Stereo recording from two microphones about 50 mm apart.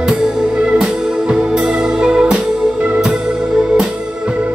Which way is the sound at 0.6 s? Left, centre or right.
Centre.